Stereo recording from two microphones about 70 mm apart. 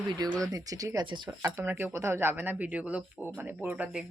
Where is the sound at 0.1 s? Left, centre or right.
Right.